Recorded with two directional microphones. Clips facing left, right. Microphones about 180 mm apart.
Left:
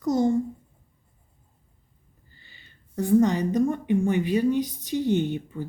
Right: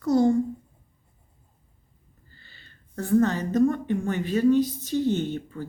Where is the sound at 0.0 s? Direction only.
15° left (ahead or behind).